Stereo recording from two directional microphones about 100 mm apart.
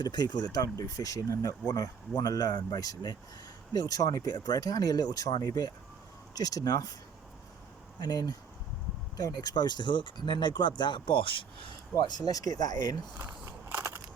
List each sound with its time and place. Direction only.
0.0 s speech: 45° left (ahead or behind)
7.9 s speech: 45° left (ahead or behind); by 11.4 s 60° left (ahead or behind)
11.9 s speech: 40° left (ahead or behind)
13.4 s crushing: 25° right (ahead or behind)